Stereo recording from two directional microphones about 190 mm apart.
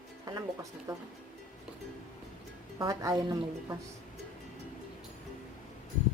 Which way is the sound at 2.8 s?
20° right (ahead or behind).